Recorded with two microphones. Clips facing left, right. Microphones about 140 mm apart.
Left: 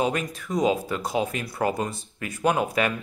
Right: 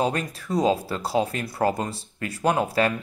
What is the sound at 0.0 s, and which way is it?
Speech, 35° right (ahead or behind).